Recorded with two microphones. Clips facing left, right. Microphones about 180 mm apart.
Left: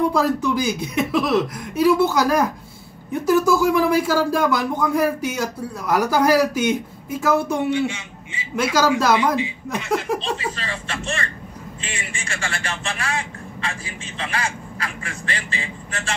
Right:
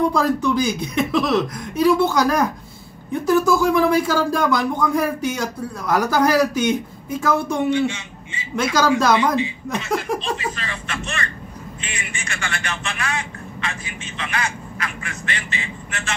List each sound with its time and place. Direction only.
0.1 s speech: 5° left (ahead or behind)
10.1 s speech: 30° left (ahead or behind)